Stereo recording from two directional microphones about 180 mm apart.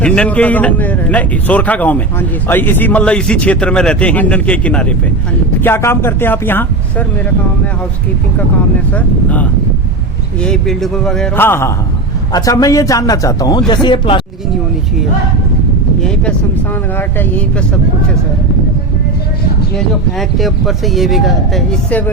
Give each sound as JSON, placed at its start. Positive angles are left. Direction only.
{"t": 0.0, "sound": "a man's voice", "side_deg": 5}
{"t": 8.9, "sound": "a man's voice", "side_deg": 10}
{"t": 17.0, "sound": "a man's voice", "side_deg": 10}
{"t": 19.7, "sound": "speech", "side_deg": 0}